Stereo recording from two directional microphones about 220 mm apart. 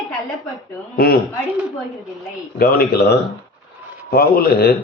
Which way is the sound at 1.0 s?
45° left (ahead or behind).